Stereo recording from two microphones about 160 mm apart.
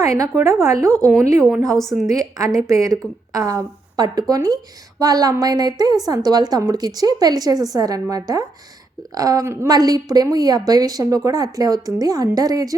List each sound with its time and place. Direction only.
0.0 s a woman's voice: 20° right (ahead or behind)
0.9 s a woman's voice: 5° left (ahead or behind)
1.2 s a woman's voice: 20° right (ahead or behind)